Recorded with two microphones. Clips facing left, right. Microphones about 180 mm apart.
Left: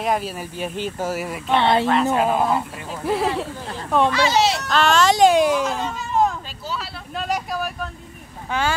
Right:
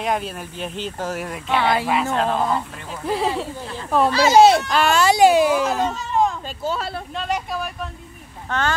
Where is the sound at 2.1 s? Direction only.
10° left (ahead or behind).